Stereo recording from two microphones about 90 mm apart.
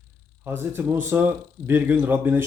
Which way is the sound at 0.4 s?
25° right (ahead or behind).